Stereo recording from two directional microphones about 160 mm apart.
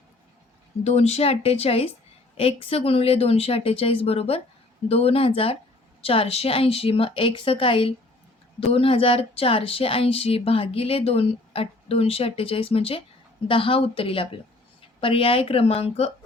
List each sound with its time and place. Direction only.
0.9 s speech: 40° left (ahead or behind)